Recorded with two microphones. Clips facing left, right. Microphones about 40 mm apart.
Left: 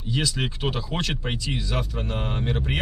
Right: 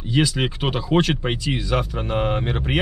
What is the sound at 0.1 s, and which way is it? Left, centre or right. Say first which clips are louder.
Speech: right 6 dB; centre.